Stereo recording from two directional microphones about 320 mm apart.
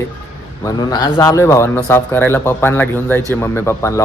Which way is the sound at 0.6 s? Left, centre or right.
Centre.